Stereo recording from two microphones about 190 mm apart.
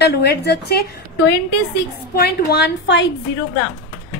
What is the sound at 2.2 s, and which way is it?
Speech, 55° left (ahead or behind).